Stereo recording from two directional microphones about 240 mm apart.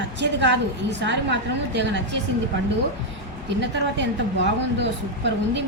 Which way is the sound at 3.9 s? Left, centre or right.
Right.